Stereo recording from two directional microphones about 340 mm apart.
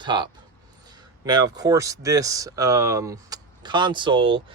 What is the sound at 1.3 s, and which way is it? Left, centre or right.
Speech, centre.